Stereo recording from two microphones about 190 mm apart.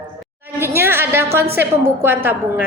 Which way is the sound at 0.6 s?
10° right (ahead or behind).